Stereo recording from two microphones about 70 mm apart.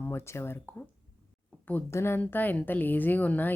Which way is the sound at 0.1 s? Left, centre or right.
Left.